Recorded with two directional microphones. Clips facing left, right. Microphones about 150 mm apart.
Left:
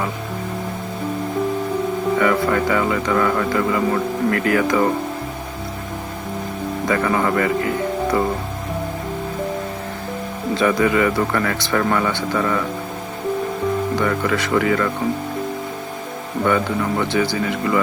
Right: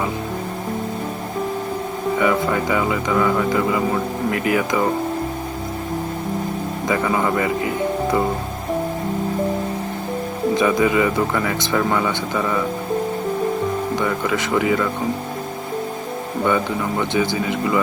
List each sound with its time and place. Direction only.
2.1 s speech: 15° right (ahead or behind)
6.8 s speech: 15° right (ahead or behind)
10.5 s speech: 15° right (ahead or behind)
13.9 s speech: 15° right (ahead or behind)
16.4 s speech: 15° right (ahead or behind)